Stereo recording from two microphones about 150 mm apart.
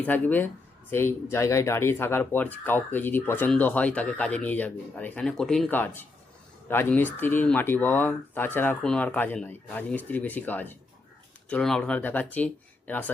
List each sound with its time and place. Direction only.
0.0 s speech: 10° left (ahead or behind)